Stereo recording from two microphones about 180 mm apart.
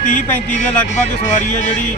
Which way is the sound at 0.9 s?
45° left (ahead or behind).